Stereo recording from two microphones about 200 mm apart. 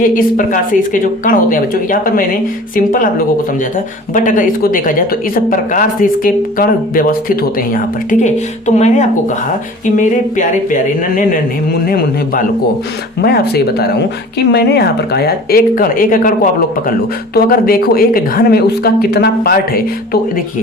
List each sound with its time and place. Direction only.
0.0 s speech: 45° left (ahead or behind)
8.2 s a sound: 35° left (ahead or behind)
11.9 s speech: 45° left (ahead or behind)
17.3 s speech: 50° left (ahead or behind)